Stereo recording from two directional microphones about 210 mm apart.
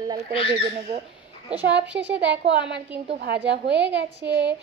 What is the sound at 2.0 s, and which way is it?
A woman's voice, 55° right (ahead or behind).